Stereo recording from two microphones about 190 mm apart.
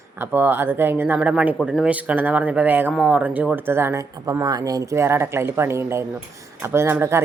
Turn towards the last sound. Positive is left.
turn(degrees=-10)  # may be behind; listen again after turning